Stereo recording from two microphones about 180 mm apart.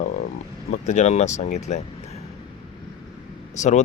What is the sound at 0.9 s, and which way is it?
Speech, 40° left (ahead or behind).